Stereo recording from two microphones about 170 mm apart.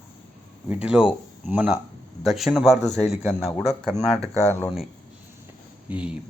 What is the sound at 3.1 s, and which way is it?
Speech, 5° right (ahead or behind).